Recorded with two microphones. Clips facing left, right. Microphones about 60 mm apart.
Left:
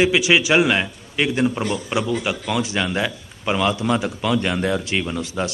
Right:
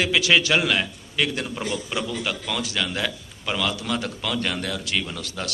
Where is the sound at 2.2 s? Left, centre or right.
Centre.